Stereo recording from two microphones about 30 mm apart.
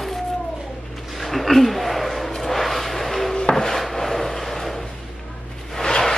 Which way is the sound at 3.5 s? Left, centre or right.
Centre.